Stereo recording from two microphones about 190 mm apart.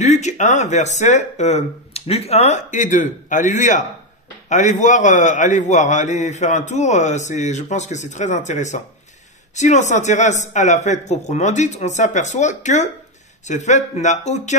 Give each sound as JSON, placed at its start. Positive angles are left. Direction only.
{"t": 0.0, "sound": "a man's voice", "side_deg": 35}